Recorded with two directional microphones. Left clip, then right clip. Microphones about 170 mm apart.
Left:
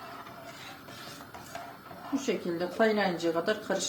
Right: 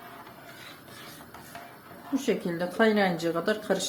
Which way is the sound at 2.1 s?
55° right (ahead or behind).